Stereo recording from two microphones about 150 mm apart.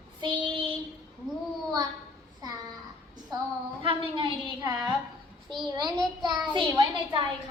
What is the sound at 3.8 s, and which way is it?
Speech, 35° right (ahead or behind).